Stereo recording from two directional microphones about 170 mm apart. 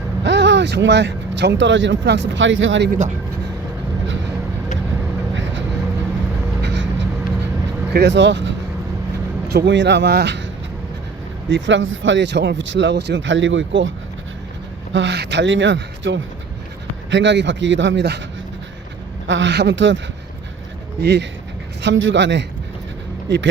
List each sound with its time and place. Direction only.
0.2 s speech: 90° right
6.6 s a sound: 90° right
7.9 s speech: 90° right
11.4 s speech: 90° right
14.9 s speech: 85° right
19.3 s speech: 90° right
21.0 s speech: 90° right